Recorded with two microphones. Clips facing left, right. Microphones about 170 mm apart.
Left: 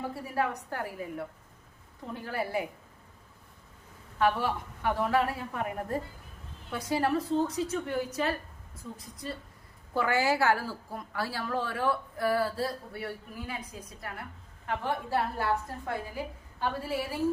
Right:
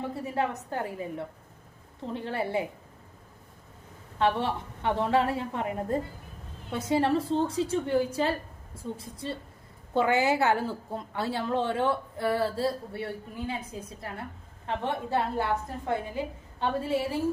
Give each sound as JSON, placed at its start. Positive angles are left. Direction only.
{"t": 0.1, "sound": "a woman's voice", "side_deg": -25}
{"t": 4.2, "sound": "a woman's voice", "side_deg": -25}